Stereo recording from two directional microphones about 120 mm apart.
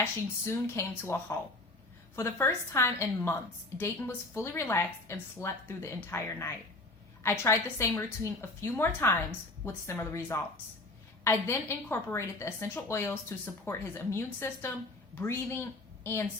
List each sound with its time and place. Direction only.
0.0 s a woman's voice: 20° left (ahead or behind)